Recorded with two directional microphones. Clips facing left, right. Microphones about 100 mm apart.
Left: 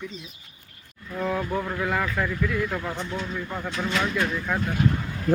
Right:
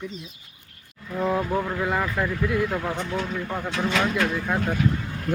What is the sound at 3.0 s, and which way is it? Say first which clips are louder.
Speech: right 3 dB; 70° right (ahead or behind).